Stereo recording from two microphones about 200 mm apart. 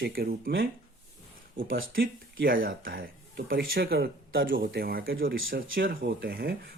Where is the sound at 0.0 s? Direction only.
50° right (ahead or behind).